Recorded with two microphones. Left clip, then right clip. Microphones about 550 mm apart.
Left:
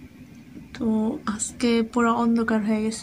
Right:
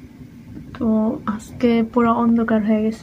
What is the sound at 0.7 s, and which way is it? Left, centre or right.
Speech, left.